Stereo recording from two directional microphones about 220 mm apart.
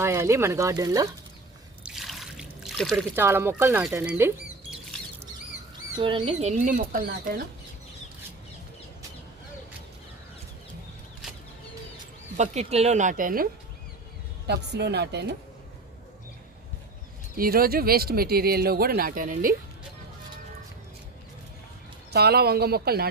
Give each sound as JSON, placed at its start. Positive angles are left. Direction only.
{"t": 0.0, "sound": "speech", "side_deg": -10}
{"t": 1.8, "sound": "trickle", "side_deg": 0}
{"t": 3.2, "sound": "speech", "side_deg": -10}
{"t": 6.0, "sound": "speech", "side_deg": -25}
{"t": 12.4, "sound": "speech", "side_deg": -30}
{"t": 14.4, "sound": "speech", "side_deg": -50}
{"t": 17.3, "sound": "speech", "side_deg": -40}
{"t": 22.1, "sound": "speech", "side_deg": -45}